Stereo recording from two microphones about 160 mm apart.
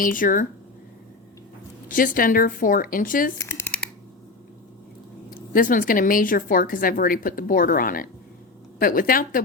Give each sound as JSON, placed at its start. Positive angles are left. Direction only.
{"t": 0.0, "sound": "speech", "side_deg": 60}
{"t": 1.9, "sound": "speech", "side_deg": 60}
{"t": 3.3, "sound": "shuffling cards", "side_deg": 15}
{"t": 5.3, "sound": "speech", "side_deg": 60}